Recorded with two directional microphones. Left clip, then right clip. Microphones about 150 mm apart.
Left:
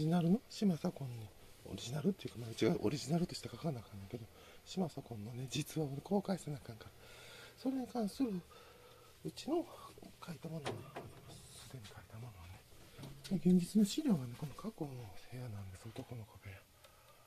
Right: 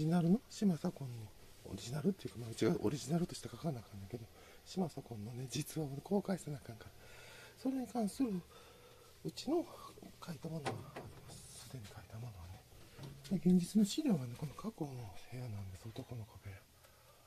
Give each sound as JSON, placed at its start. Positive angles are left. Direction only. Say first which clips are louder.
{"t": 0.0, "sound": "speech", "louder": "even", "side_deg": -15}
{"t": 0.6, "sound": "speech", "louder": "even", "side_deg": -5}
{"t": 13.4, "sound": "speech", "louder": "left 1 dB", "side_deg": -15}